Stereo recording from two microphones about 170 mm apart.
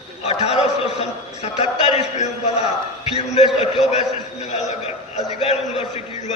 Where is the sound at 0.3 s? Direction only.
40° left (ahead or behind).